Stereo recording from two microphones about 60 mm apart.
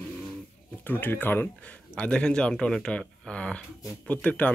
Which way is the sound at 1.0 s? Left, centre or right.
Left.